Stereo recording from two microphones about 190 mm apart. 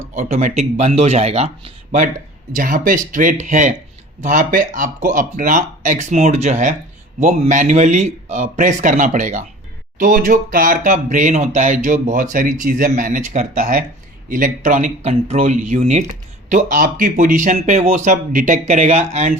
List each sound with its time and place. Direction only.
0.0 s speech: 40° right (ahead or behind)